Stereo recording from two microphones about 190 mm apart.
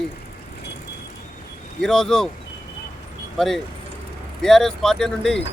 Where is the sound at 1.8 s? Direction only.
5° left (ahead or behind).